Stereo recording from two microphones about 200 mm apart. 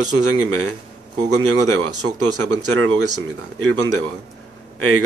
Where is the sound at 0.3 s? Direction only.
90° right.